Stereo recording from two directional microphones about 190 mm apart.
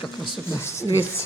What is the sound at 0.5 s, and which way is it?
Speech, 15° left (ahead or behind).